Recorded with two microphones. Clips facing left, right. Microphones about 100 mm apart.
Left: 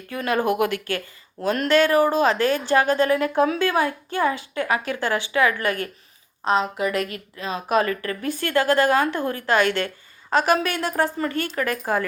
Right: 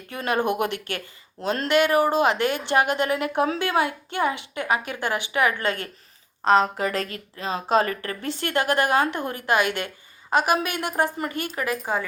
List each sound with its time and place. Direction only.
0.1 s a woman's voice: 25° right (ahead or behind)
6.4 s a woman's voice: 40° right (ahead or behind); by 12.0 s 5° right (ahead or behind)